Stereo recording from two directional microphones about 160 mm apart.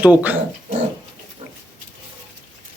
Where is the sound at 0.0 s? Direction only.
10° right (ahead or behind).